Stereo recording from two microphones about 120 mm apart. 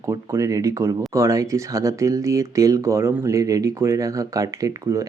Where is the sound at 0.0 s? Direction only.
25° right (ahead or behind).